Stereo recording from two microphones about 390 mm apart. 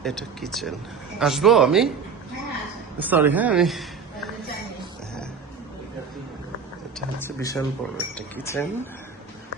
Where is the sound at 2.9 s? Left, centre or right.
Centre.